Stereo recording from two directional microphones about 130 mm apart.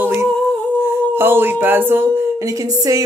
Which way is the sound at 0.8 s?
15° right (ahead or behind).